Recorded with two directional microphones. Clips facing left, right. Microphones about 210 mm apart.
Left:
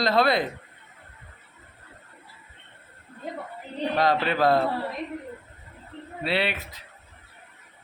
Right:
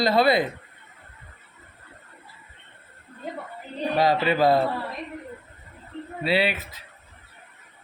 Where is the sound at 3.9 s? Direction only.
5° right (ahead or behind).